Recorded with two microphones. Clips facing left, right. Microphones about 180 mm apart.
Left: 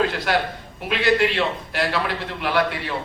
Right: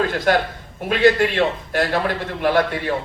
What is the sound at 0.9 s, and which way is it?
A man's voice, 50° right (ahead or behind).